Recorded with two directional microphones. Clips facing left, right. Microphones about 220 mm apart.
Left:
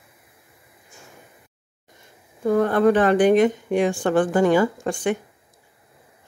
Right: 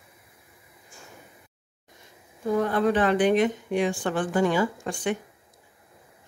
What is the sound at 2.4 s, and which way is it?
A woman's voice, 55° left (ahead or behind).